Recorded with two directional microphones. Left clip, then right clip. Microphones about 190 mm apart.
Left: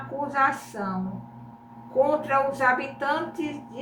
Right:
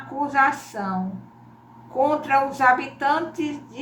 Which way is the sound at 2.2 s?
15° right (ahead or behind).